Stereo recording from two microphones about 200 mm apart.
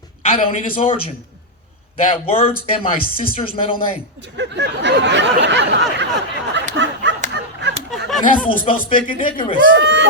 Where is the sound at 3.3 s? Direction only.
30° left (ahead or behind).